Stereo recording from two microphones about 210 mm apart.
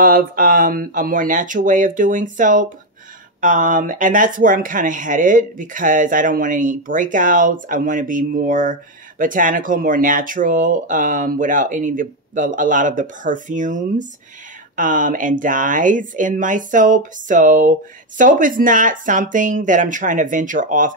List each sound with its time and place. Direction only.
0.0 s speech: 45° right (ahead or behind)